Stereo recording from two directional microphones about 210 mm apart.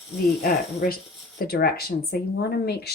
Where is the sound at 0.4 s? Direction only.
45° left (ahead or behind).